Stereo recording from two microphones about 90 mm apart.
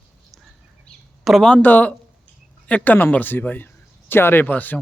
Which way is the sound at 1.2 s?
Centre (ahead or behind).